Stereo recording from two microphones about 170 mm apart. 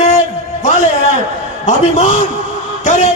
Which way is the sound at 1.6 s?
45° left (ahead or behind).